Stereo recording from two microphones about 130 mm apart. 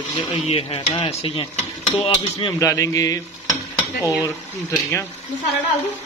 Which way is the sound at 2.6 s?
25° left (ahead or behind).